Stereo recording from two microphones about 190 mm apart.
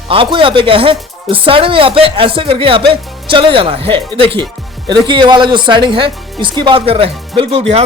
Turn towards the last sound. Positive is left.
turn(degrees=-30)  # may be behind; listen again after turning